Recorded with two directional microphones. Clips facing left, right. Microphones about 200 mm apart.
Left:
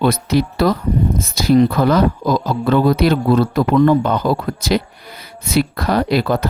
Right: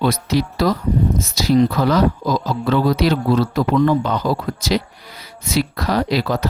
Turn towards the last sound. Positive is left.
turn(degrees=55)  # may be behind; listen again after turning